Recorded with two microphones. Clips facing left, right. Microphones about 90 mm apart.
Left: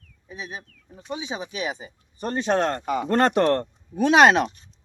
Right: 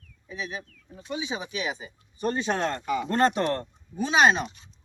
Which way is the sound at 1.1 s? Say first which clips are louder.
Left 1 dB; 30° left (ahead or behind).